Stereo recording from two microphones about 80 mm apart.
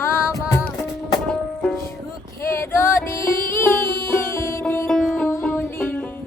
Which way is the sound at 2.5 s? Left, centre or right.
Left.